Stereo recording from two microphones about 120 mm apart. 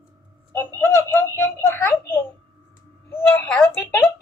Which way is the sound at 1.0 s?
20° left (ahead or behind).